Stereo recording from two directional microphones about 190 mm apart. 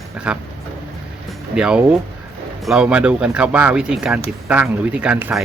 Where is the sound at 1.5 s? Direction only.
5° right (ahead or behind).